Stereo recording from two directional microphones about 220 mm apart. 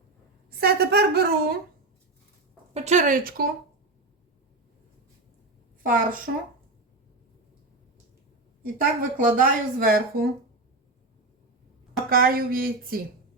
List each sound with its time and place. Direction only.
0.6 s speech: 45° right (ahead or behind)
2.7 s a woman's voice: 30° right (ahead or behind)
5.8 s a woman's voice: 40° right (ahead or behind)
8.6 s a woman's voice: 35° right (ahead or behind)
12.0 s a woman's voice: 40° right (ahead or behind)